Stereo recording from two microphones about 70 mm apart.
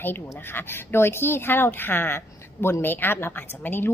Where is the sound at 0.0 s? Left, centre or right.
Left.